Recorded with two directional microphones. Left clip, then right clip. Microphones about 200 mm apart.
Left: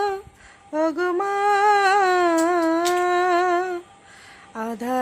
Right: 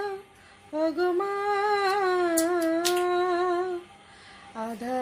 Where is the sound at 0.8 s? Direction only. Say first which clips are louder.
Left 4 dB; 25° left (ahead or behind).